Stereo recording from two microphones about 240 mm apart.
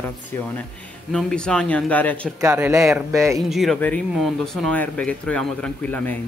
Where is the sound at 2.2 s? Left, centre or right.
Centre.